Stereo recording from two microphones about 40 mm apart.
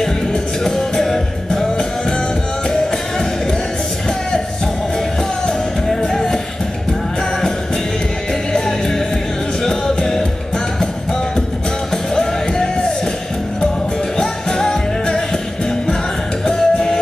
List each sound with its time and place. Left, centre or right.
0.3 s music: centre
5.9 s music: centre
8.5 s music: centre
11.9 s music: centre
14.1 s music: centre
16.4 s music: centre